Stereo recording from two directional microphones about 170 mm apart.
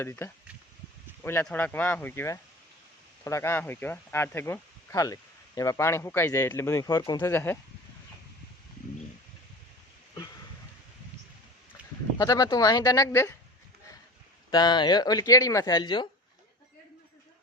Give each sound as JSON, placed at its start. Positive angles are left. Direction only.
{"t": 0.0, "sound": "speech", "side_deg": 15}
{"t": 11.8, "sound": "sheep", "side_deg": -5}
{"t": 12.1, "sound": "speech", "side_deg": 20}
{"t": 14.5, "sound": "speech", "side_deg": 25}